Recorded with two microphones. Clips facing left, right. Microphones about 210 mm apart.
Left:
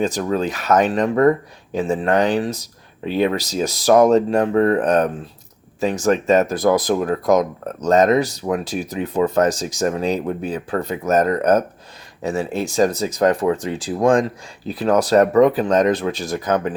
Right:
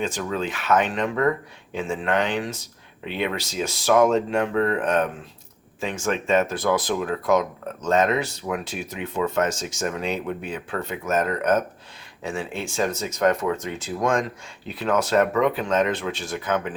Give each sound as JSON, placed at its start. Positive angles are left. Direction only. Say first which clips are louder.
{"t": 0.0, "sound": "speech", "louder": "left 6 dB", "side_deg": 40}